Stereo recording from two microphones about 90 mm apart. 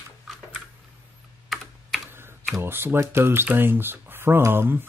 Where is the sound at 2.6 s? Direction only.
25° right (ahead or behind).